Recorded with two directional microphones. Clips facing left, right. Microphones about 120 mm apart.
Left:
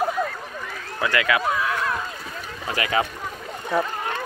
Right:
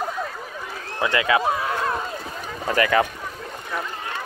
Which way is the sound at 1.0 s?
25° right (ahead or behind).